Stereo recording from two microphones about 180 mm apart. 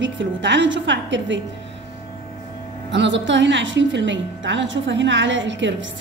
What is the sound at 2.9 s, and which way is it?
A woman's voice, 85° right.